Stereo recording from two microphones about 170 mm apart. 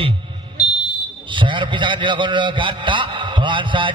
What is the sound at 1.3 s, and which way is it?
A man's voice, 30° right (ahead or behind).